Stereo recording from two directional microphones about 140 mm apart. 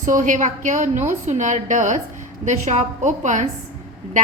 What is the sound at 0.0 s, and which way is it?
A woman's voice, 65° right (ahead or behind).